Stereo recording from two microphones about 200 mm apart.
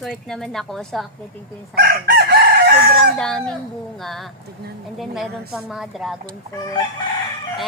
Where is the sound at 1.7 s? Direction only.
50° right (ahead or behind).